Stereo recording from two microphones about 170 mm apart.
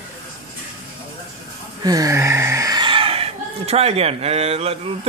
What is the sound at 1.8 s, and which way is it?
Speech, 20° right (ahead or behind).